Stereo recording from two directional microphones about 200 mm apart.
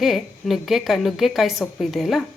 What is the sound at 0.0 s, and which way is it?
Speech, centre (ahead or behind).